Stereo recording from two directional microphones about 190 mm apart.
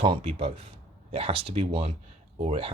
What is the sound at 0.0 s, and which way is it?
Speech, 30° right (ahead or behind).